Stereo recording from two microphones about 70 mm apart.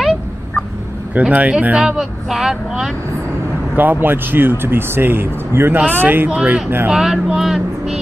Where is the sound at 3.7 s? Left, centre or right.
Right.